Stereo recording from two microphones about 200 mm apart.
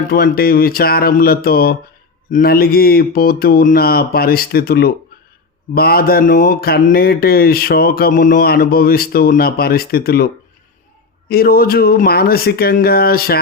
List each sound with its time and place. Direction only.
0.1 s speech: 50° left (ahead or behind)
11.3 s speech: 50° left (ahead or behind)